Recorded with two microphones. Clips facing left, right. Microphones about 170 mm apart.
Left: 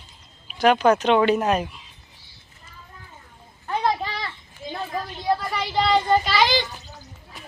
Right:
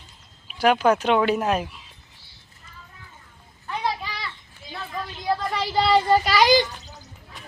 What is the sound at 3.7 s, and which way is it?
Children playing, 45° left (ahead or behind).